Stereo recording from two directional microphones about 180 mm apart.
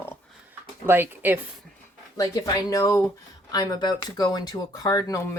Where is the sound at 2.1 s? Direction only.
20° left (ahead or behind).